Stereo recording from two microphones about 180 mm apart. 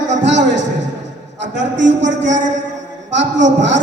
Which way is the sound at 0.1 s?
85° right.